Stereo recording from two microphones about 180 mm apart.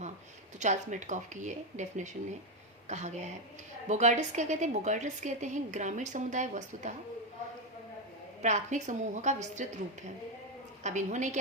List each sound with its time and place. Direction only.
0.6 s a woman's voice: 40° right (ahead or behind)
8.4 s a woman's voice: 40° right (ahead or behind)
10.8 s speech: 40° right (ahead or behind)